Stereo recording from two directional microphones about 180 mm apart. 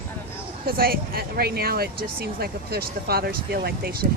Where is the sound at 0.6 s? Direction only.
55° right (ahead or behind).